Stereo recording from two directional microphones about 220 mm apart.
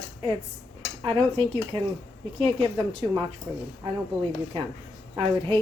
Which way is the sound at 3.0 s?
20° right (ahead or behind).